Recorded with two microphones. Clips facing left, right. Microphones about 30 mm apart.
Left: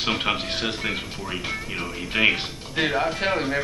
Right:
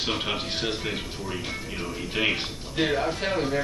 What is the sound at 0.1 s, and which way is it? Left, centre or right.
Speech, left.